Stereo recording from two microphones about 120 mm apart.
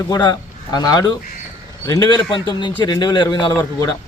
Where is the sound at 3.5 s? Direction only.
25° left (ahead or behind).